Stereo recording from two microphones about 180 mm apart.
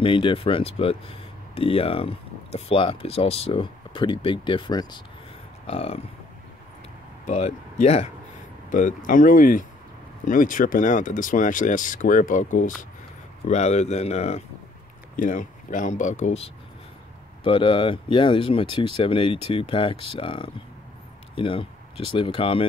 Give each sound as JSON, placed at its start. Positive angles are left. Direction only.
{"t": 0.0, "sound": "speech", "side_deg": 30}
{"t": 5.7, "sound": "speech", "side_deg": 35}
{"t": 7.2, "sound": "speech", "side_deg": 40}
{"t": 17.4, "sound": "speech", "side_deg": 25}